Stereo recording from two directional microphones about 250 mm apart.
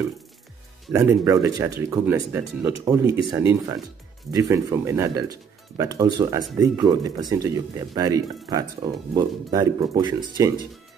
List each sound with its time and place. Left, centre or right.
0.9 s speech: centre